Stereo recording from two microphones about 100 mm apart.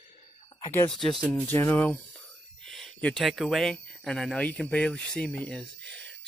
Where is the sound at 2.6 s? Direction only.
5° left (ahead or behind).